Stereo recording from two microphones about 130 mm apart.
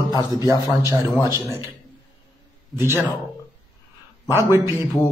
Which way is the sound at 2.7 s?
20° right (ahead or behind).